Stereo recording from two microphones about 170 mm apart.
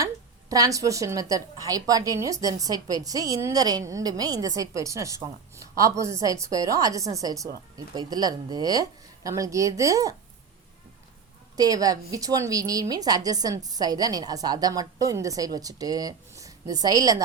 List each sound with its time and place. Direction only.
0.5 s a woman's voice: 20° right (ahead or behind)
11.5 s a woman's voice: 20° right (ahead or behind)